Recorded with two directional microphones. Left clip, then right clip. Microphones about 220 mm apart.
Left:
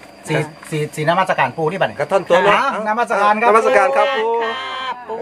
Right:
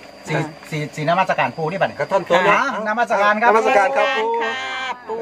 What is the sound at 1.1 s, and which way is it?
Speech, 50° left (ahead or behind).